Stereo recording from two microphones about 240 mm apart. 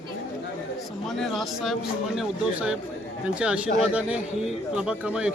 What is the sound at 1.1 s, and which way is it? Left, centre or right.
A man's voice, centre.